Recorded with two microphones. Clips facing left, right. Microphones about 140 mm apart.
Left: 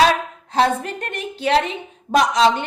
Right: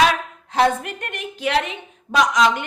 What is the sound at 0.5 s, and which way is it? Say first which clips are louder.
A woman's voice: even; 30° left (ahead or behind).